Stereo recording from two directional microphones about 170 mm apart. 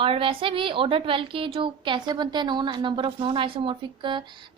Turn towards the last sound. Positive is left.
turn(degrees=-25)  # may be behind; listen again after turning